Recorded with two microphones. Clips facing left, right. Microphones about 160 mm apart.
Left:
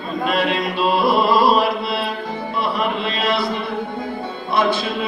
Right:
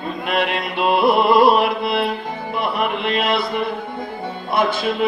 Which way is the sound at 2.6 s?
60° right (ahead or behind).